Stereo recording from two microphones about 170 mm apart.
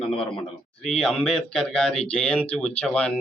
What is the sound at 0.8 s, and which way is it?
A man's voice, centre (ahead or behind).